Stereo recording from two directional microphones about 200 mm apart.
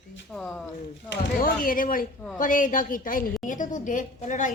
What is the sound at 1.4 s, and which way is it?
A woman's voice, 45° left (ahead or behind).